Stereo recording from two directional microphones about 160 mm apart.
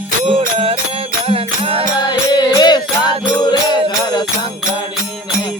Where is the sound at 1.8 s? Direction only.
25° left (ahead or behind).